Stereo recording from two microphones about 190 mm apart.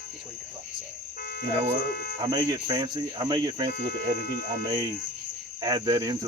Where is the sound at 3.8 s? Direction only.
50° left (ahead or behind).